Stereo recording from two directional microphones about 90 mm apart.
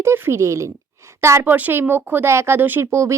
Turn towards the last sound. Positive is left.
turn(degrees=-30)  # may be behind; listen again after turning